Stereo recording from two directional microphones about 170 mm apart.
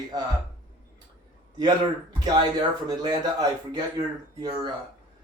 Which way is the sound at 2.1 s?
25° right (ahead or behind).